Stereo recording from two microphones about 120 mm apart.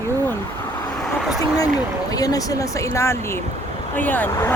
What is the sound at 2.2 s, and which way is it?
Speech, 30° left (ahead or behind).